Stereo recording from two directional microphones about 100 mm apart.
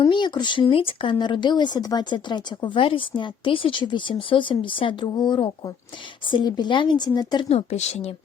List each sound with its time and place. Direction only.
0.0 s speech: 50° left (ahead or behind)
7.4 s speech: 90° left